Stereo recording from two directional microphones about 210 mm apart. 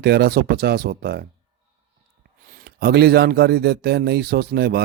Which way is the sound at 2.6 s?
50° right (ahead or behind).